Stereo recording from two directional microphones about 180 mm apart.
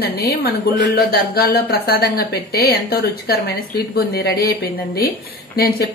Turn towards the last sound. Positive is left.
turn(degrees=55)  # may be behind; listen again after turning